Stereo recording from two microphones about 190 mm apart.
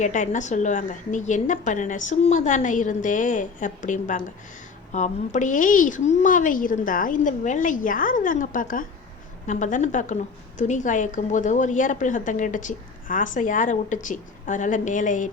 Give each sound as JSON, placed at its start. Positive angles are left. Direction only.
{"t": 0.0, "sound": "a woman's voice", "side_deg": 40}